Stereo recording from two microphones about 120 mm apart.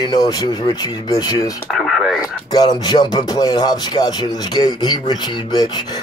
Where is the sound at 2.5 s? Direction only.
35° left (ahead or behind).